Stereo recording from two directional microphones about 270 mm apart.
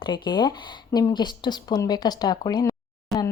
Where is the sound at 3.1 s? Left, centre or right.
Centre.